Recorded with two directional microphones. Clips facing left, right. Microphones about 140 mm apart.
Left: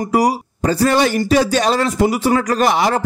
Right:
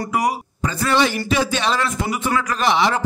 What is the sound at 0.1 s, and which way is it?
A man's voice, 35° left (ahead or behind).